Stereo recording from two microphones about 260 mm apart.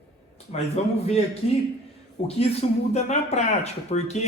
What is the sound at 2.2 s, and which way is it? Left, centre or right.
Speech, left.